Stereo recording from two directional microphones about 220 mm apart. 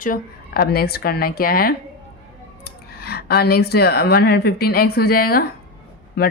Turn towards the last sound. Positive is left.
turn(degrees=45)  # may be behind; listen again after turning